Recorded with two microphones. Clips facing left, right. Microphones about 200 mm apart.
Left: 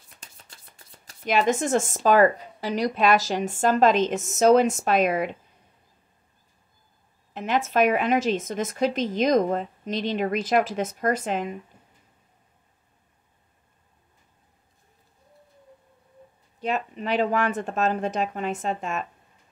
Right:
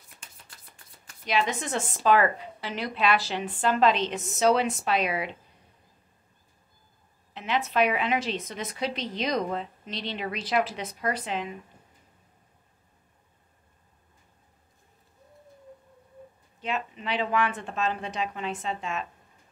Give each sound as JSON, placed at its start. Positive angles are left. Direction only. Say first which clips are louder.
{"t": 1.2, "sound": "a woman's voice", "louder": "left 6 dB", "side_deg": 45}
{"t": 7.3, "sound": "a woman's voice", "louder": "left 3 dB", "side_deg": 45}
{"t": 16.6, "sound": "a woman's voice", "louder": "left 5 dB", "side_deg": 40}